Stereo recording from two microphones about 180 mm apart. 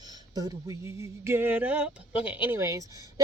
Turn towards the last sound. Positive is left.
turn(degrees=-20)  # may be behind; listen again after turning